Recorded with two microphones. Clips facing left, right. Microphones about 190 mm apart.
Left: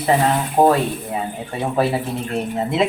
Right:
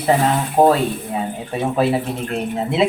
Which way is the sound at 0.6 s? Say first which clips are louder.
Right 1 dB; 5° right (ahead or behind).